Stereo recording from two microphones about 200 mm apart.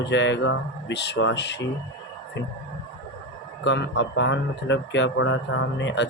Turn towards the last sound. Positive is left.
turn(degrees=65)  # may be behind; listen again after turning